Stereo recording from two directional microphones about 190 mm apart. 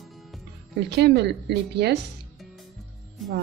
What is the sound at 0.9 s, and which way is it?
Speech, 60° right (ahead or behind).